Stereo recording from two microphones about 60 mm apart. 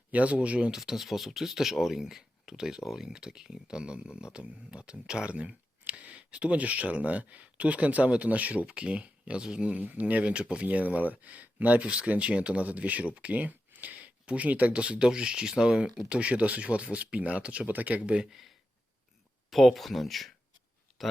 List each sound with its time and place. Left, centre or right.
0.1 s speech: right
0.7 s speech: centre
18.3 s speech: centre